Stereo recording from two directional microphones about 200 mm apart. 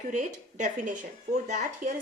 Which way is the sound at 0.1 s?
40° right (ahead or behind).